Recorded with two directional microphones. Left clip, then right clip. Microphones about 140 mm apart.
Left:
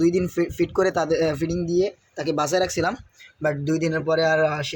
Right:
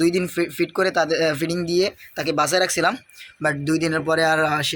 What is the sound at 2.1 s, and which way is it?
Speech, 20° left (ahead or behind).